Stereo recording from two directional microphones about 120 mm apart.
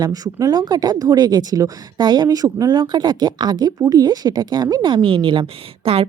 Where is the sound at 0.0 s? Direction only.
30° right (ahead or behind).